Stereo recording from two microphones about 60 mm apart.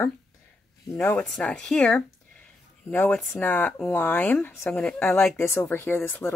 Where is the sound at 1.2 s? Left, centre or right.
Centre.